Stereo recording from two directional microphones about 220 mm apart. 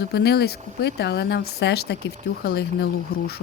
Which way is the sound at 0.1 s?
50° left (ahead or behind).